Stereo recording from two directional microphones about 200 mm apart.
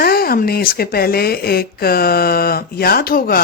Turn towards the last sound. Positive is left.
turn(degrees=50)  # may be behind; listen again after turning